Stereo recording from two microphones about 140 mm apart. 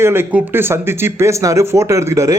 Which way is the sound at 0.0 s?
15° right (ahead or behind).